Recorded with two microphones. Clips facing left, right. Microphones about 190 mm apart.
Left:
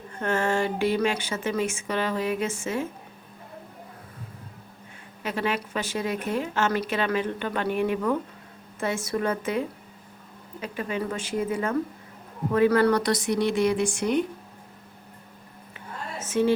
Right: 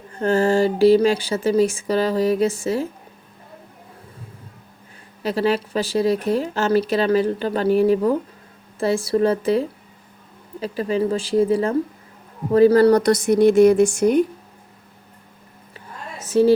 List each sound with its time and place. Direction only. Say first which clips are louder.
0.2 s speech: right 8 dB; 35° right (ahead or behind)
5.2 s speech: right 8 dB; 35° right (ahead or behind)
16.1 s a woman's voice: right 8 dB; 35° right (ahead or behind)